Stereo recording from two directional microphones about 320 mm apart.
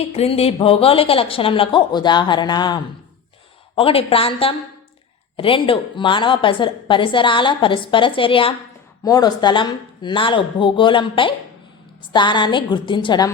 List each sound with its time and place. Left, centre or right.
0.1 s a woman's voice: centre